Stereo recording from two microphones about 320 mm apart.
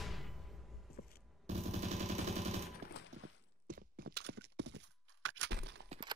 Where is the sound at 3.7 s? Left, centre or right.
Right.